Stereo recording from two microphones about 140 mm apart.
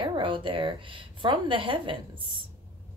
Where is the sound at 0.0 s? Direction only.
35° right (ahead or behind).